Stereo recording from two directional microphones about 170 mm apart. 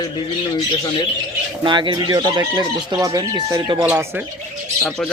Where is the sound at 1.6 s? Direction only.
25° right (ahead or behind).